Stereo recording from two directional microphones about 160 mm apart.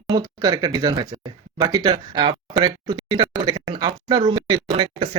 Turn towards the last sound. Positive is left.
turn(degrees=-30)  # may be behind; listen again after turning